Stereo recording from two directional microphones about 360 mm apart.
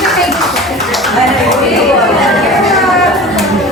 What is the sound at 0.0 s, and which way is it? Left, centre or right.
Clapping, centre.